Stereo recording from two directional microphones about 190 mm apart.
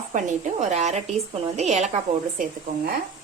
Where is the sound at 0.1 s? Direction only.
40° right (ahead or behind).